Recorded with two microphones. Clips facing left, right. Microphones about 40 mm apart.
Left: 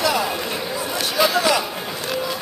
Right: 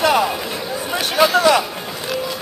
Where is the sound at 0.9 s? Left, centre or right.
Right.